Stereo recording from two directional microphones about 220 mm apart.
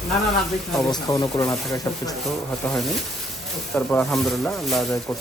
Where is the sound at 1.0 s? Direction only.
15° left (ahead or behind).